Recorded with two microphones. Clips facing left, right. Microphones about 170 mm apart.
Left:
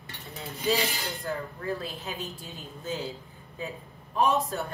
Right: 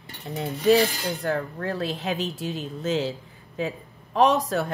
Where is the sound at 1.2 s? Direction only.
80° right.